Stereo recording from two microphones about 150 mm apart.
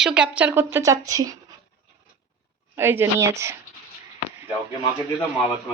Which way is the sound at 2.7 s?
15° right (ahead or behind).